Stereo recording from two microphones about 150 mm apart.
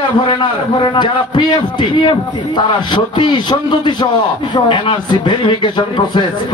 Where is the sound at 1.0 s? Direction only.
30° left (ahead or behind).